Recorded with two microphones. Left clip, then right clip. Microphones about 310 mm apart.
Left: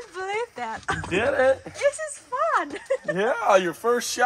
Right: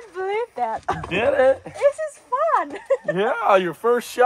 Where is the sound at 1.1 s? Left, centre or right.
Right.